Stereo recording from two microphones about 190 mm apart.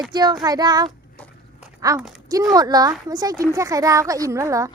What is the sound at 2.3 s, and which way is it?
Child singing, 20° right (ahead or behind).